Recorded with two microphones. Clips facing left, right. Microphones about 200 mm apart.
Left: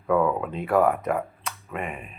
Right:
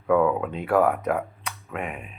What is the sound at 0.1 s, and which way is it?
Speech, centre (ahead or behind).